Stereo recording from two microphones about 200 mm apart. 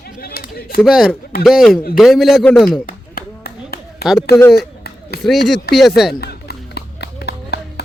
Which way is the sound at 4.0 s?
Centre (ahead or behind).